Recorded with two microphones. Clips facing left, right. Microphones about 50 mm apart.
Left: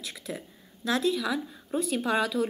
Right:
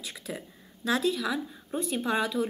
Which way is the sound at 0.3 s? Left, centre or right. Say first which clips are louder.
Even; centre.